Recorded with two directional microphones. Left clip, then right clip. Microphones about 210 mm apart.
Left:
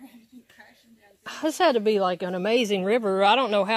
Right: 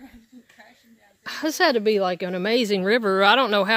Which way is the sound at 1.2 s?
15° right (ahead or behind).